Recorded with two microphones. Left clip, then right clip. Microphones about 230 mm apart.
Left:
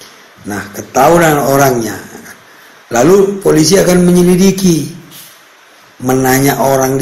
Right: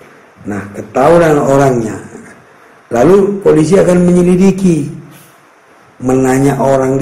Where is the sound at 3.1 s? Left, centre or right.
Left.